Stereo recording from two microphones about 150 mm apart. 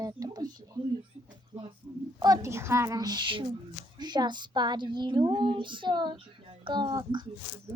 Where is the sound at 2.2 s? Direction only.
25° right (ahead or behind).